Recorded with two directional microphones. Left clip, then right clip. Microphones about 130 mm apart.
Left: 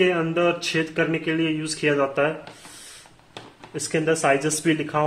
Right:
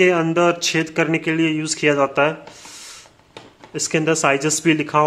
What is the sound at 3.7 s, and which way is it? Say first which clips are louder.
Speech: right 4 dB; 50° right (ahead or behind).